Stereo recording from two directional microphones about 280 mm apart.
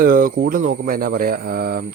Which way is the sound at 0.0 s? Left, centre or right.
Right.